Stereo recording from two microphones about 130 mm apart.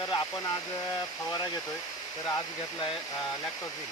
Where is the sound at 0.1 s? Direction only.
35° left (ahead or behind).